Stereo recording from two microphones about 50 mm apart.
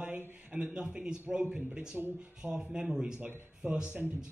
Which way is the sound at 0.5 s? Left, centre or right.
Right.